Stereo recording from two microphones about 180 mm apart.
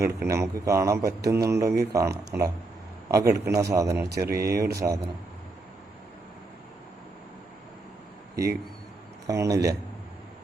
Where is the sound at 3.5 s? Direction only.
15° right (ahead or behind).